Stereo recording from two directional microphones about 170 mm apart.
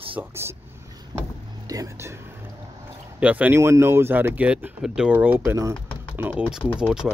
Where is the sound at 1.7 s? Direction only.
20° right (ahead or behind).